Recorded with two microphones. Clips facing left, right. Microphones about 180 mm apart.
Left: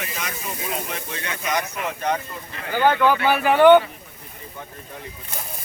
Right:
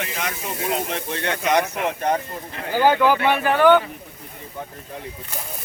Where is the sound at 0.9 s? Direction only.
65° right (ahead or behind).